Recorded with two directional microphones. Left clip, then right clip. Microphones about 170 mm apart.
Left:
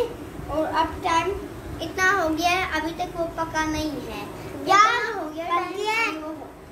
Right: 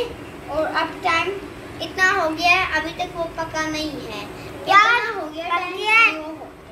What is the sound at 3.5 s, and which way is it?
Speech, 20° right (ahead or behind).